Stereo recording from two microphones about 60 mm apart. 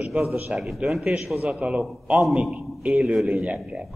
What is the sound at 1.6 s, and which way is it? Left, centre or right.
A man's voice, centre.